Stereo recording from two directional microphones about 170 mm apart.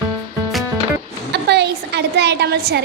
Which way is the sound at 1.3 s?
80° right.